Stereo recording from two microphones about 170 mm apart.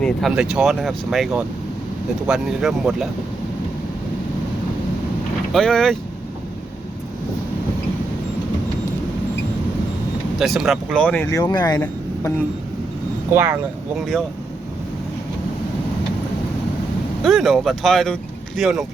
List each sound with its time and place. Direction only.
0.0 s speech: centre (ahead or behind)
5.5 s speech: 5° left (ahead or behind)
10.3 s speech: centre (ahead or behind)
11.3 s speech: 20° left (ahead or behind)
13.3 s speech: 15° right (ahead or behind)
13.9 s speech: centre (ahead or behind)
17.2 s speech: centre (ahead or behind)